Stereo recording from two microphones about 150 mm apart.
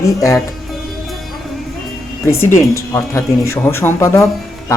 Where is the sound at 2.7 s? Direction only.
20° left (ahead or behind).